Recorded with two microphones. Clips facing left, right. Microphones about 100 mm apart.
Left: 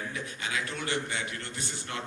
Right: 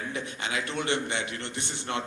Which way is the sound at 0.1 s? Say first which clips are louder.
Right 3 dB; 25° right (ahead or behind).